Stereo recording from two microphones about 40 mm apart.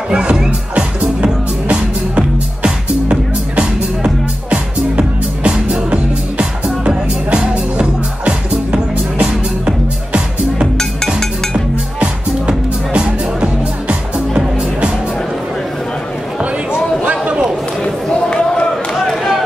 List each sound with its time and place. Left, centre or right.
0.1 s speech: right
0.5 s music: right
12.0 s music: right
17.0 s a sound: right
18.1 s basketball bounce: centre